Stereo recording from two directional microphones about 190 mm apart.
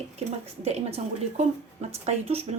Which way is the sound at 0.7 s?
35° right (ahead or behind).